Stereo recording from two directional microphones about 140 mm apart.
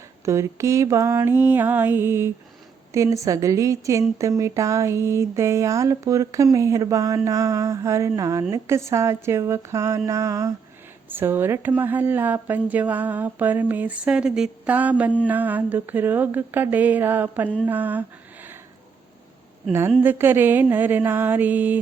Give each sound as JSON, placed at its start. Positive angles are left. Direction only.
{"t": 0.3, "sound": "speech", "side_deg": -20}
{"t": 20.0, "sound": "speech", "side_deg": -15}